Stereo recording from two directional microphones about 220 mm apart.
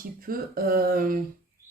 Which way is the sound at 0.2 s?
40° right (ahead or behind).